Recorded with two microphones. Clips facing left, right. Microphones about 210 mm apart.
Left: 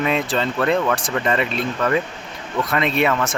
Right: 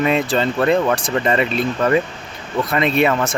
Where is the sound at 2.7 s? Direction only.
Centre (ahead or behind).